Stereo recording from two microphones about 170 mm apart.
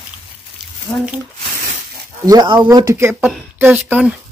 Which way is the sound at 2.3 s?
25° right (ahead or behind).